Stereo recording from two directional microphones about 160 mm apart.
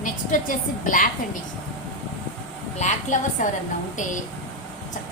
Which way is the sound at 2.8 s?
50° left (ahead or behind).